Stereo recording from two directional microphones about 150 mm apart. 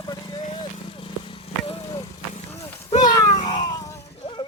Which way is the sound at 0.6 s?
35° left (ahead or behind).